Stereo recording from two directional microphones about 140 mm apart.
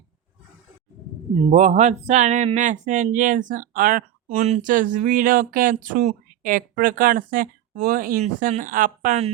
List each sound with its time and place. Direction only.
1.4 s speech: 50° right (ahead or behind); by 8.2 s 90° right
8.4 s speech: 65° right (ahead or behind)